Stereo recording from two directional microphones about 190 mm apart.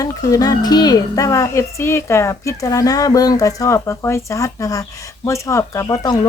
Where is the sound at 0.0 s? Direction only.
20° left (ahead or behind).